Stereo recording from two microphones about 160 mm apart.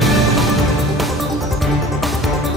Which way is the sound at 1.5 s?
Centre (ahead or behind).